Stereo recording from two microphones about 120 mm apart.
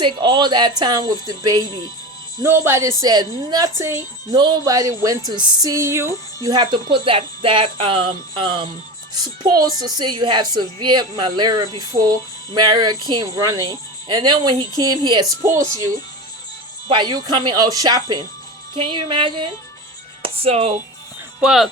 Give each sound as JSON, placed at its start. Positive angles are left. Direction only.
{"t": 0.0, "sound": "a woman's voice", "side_deg": -40}
{"t": 3.0, "sound": "a woman's voice", "side_deg": -35}
{"t": 3.8, "sound": "speech", "side_deg": -25}
{"t": 4.4, "sound": "a woman's voice", "side_deg": -35}
{"t": 6.5, "sound": "a woman's voice", "side_deg": -40}
{"t": 16.9, "sound": "a woman's voice", "side_deg": -35}
{"t": 18.8, "sound": "speech", "side_deg": -45}
{"t": 21.4, "sound": "speech", "side_deg": -5}